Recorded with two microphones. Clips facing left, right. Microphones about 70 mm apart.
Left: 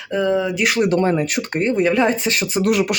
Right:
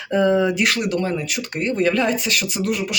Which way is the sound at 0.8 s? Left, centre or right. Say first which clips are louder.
Left 6 dB; left.